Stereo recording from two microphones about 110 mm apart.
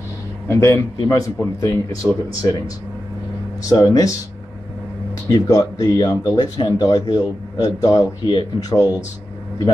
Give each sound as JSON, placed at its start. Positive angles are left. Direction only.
{"t": 0.5, "sound": "a man's voice", "side_deg": 25}
{"t": 2.0, "sound": "speech", "side_deg": -15}
{"t": 2.4, "sound": "speech", "side_deg": 35}
{"t": 5.3, "sound": "speech", "side_deg": 35}
{"t": 8.3, "sound": "speech", "side_deg": 45}